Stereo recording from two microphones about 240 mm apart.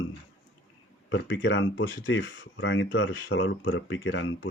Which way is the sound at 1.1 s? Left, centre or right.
Left.